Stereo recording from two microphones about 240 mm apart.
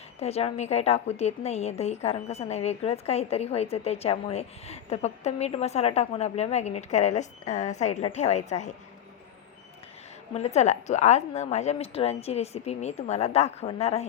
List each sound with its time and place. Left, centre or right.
0.2 s a woman's voice: left
10.3 s a woman's voice: left